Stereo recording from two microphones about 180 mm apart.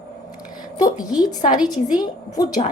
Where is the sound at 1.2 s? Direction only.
20° left (ahead or behind).